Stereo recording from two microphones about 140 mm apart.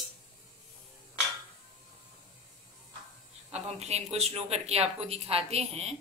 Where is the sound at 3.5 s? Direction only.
50° right (ahead or behind).